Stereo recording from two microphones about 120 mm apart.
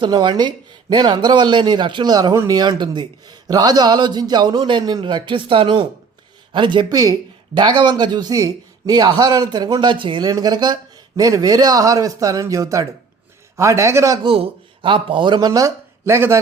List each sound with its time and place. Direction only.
0.0 s a man's voice: 35° right (ahead or behind)
14.3 s a man's voice: 45° right (ahead or behind)
15.4 s speech: 30° right (ahead or behind)